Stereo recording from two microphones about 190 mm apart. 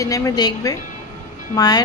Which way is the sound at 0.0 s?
15° left (ahead or behind).